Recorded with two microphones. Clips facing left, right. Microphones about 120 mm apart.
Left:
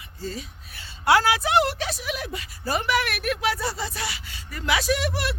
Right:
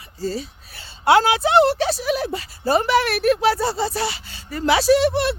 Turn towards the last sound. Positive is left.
turn(degrees=-30)  # may be behind; listen again after turning